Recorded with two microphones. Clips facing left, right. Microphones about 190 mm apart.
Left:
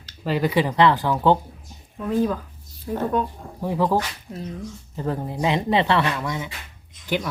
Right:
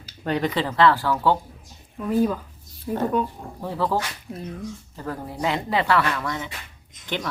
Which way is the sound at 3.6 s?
15° left (ahead or behind).